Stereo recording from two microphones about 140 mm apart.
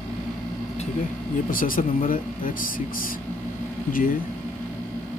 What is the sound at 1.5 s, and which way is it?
Speech, 80° left.